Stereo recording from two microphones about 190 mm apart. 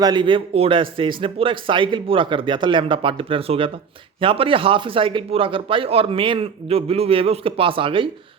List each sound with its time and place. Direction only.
0.0 s speech: 25° right (ahead or behind)